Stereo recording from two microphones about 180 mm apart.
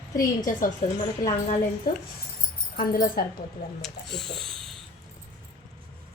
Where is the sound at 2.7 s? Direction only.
55° left (ahead or behind).